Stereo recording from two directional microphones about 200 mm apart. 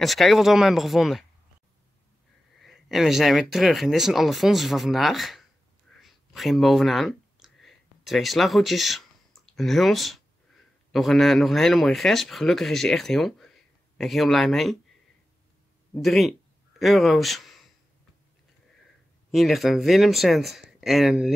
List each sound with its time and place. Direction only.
0.0 s speech: centre (ahead or behind)
2.6 s speech: centre (ahead or behind)
5.9 s a sound: centre (ahead or behind)
10.9 s speech: centre (ahead or behind)
15.9 s speech: centre (ahead or behind)
19.3 s speech: centre (ahead or behind)